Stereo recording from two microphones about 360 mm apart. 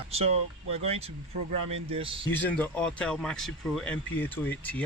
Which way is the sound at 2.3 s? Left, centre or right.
Centre.